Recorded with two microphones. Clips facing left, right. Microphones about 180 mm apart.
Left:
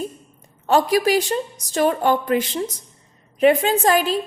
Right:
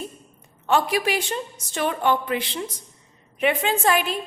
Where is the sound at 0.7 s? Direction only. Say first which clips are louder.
Left 5 dB; 40° left (ahead or behind).